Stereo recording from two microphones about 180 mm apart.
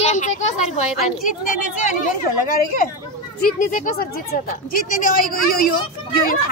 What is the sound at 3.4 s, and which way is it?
A woman's voice, 45° left (ahead or behind).